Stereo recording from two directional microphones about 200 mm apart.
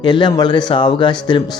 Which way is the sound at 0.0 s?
20° left (ahead or behind).